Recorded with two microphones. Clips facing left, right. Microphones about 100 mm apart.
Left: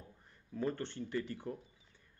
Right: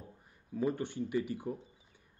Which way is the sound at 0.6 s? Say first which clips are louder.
Right 4 dB; 10° right (ahead or behind).